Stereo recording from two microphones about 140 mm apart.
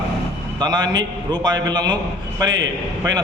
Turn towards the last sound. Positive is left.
turn(degrees=-30)  # may be behind; listen again after turning